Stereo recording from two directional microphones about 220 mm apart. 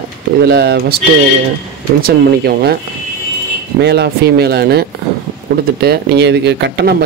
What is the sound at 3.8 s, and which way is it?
Speech, 50° right (ahead or behind).